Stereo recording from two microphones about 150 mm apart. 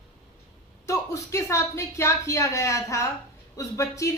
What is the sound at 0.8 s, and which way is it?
Speech, 20° left (ahead or behind).